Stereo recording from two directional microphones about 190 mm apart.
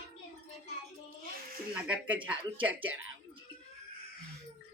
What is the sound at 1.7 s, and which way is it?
Speech, 10° right (ahead or behind).